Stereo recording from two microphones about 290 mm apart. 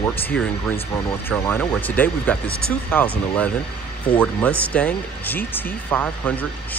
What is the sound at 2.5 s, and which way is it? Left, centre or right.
Speech, left.